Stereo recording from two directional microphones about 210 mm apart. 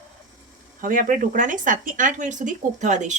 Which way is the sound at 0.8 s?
40° right (ahead or behind).